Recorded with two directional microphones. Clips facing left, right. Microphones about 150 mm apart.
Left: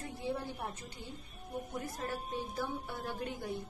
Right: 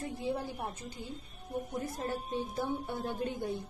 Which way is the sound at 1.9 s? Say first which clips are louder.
Right 3 dB; 25° right (ahead or behind).